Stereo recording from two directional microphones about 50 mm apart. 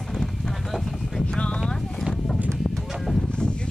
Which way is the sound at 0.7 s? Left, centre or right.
Centre.